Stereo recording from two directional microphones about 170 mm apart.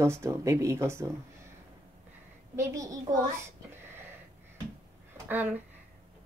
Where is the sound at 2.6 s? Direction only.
20° right (ahead or behind).